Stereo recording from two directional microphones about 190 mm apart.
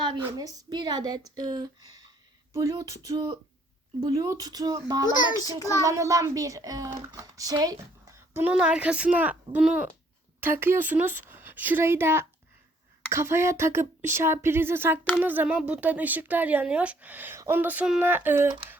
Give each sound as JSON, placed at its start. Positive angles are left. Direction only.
{"t": 0.2, "sound": "a woman's voice", "side_deg": -20}
{"t": 5.5, "sound": "child singing", "side_deg": 15}
{"t": 5.8, "sound": "speech", "side_deg": -15}